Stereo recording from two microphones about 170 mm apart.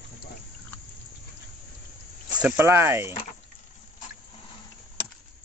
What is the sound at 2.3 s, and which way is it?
Speech, 10° right (ahead or behind).